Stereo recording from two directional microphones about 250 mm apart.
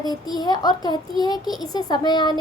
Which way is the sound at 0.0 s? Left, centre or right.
Centre.